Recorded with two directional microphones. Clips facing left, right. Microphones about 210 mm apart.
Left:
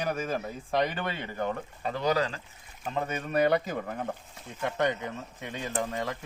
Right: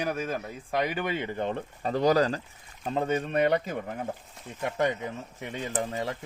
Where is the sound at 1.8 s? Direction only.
35° right (ahead or behind).